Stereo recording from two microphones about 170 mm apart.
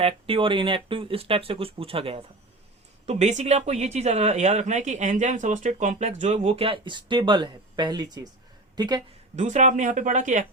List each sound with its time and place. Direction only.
0.0 s a woman's voice: 30° right (ahead or behind)
9.3 s speech: 45° right (ahead or behind)